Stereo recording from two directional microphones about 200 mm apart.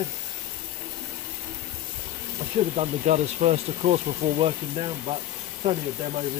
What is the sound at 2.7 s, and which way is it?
Speech, 35° right (ahead or behind).